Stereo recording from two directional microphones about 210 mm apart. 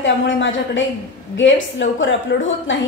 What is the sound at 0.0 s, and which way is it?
A woman's voice, 60° left (ahead or behind).